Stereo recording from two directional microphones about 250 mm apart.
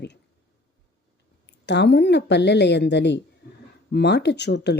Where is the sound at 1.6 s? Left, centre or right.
Left.